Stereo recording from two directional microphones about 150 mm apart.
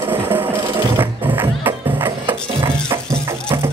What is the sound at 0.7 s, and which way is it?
Music, 15° right (ahead or behind).